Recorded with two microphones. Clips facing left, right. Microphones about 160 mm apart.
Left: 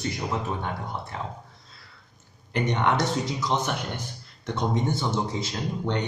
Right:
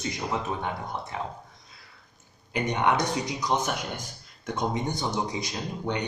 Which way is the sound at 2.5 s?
10° right (ahead or behind).